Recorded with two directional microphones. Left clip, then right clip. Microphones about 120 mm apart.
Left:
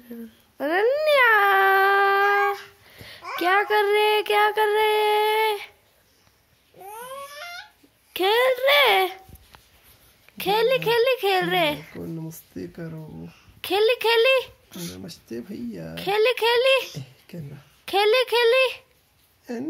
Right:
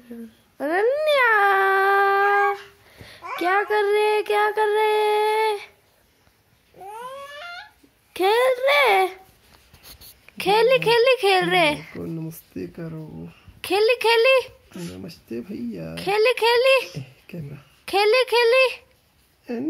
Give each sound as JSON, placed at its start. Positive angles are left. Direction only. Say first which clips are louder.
{"t": 0.1, "sound": "a sound", "louder": "even", "side_deg": 10}
{"t": 6.8, "sound": "a sound", "louder": "right 2 dB", "side_deg": 5}
{"t": 10.2, "sound": "speech", "louder": "right 3 dB", "side_deg": -5}
{"t": 12.0, "sound": "speech", "louder": "right 3 dB", "side_deg": -30}
{"t": 13.2, "sound": "a child's voice", "louder": "right 1 dB", "side_deg": 0}
{"t": 15.0, "sound": "speech", "louder": "right 2 dB", "side_deg": -30}
{"t": 15.9, "sound": "speech", "louder": "right 1 dB", "side_deg": 0}
{"t": 19.4, "sound": "speech", "louder": "right 3 dB", "side_deg": -30}